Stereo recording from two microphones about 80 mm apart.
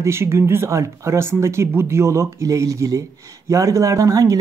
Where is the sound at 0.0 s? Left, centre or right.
Right.